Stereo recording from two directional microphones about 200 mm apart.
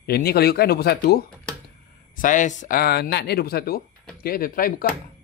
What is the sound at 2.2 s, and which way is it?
Speech, 40° left (ahead or behind).